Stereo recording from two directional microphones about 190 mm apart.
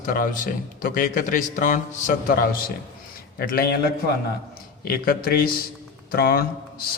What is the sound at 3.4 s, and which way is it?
Speech, 55° left (ahead or behind).